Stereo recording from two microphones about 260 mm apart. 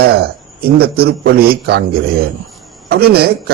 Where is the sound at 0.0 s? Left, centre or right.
Right.